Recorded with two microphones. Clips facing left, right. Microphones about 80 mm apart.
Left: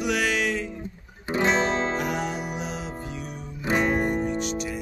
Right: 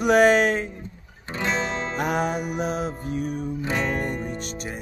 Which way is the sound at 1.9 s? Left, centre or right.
Right.